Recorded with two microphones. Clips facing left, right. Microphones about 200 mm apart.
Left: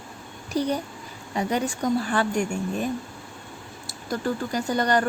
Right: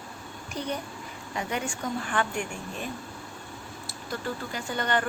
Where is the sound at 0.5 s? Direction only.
35° left (ahead or behind).